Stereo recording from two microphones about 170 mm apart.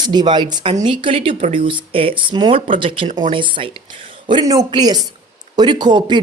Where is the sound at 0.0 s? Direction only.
25° right (ahead or behind).